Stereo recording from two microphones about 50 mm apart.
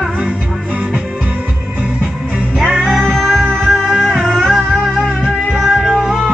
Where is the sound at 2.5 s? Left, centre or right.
Centre.